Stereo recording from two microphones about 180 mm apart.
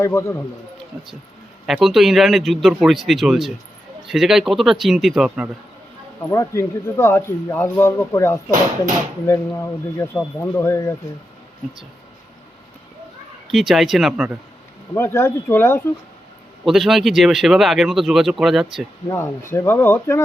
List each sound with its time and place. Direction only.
0.0 s speech: 15° left (ahead or behind)
1.6 s speech: centre (ahead or behind)
6.3 s speech: 15° left (ahead or behind)
13.5 s speech: centre (ahead or behind)
14.9 s speech: 15° left (ahead or behind)
16.6 s speech: centre (ahead or behind)
19.0 s speech: 15° left (ahead or behind)